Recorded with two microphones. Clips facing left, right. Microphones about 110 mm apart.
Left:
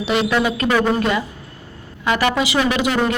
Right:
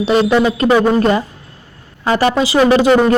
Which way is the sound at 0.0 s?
40° right (ahead or behind).